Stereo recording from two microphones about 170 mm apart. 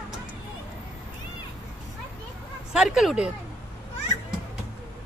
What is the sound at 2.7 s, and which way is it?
Speech, 5° right (ahead or behind).